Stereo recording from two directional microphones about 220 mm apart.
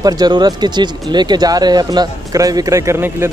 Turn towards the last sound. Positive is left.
turn(degrees=-10)  # may be behind; listen again after turning